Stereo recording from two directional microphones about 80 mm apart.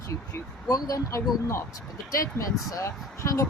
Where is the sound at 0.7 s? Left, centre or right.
Left.